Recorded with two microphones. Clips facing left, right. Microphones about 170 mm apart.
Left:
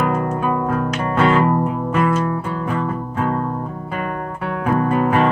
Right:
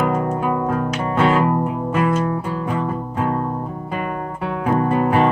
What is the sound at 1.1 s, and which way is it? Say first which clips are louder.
Music: left 1 dB; 5° right (ahead or behind).